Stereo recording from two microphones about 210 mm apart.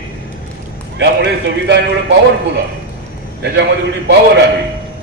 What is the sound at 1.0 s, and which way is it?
Speech, 55° right (ahead or behind).